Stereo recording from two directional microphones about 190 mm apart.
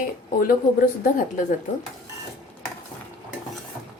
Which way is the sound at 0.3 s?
50° left (ahead or behind).